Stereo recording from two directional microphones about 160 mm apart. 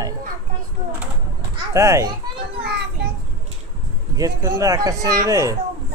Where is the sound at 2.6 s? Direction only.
90° right.